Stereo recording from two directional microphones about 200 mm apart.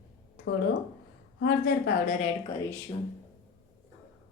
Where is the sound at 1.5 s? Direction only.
50° left (ahead or behind).